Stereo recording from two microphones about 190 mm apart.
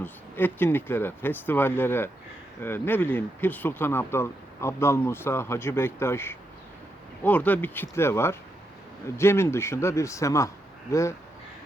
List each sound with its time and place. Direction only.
0.0 s speech: 10° left (ahead or behind)